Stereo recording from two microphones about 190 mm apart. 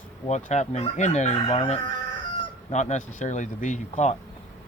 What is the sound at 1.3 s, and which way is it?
Chicken, 30° left (ahead or behind).